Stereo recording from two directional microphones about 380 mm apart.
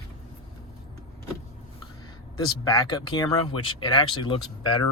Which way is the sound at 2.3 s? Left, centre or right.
Centre.